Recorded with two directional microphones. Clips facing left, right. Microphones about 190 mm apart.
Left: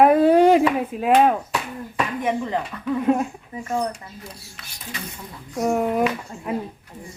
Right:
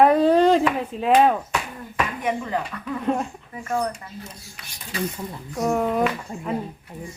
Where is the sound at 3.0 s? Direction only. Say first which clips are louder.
Left 4 dB; 5° left (ahead or behind).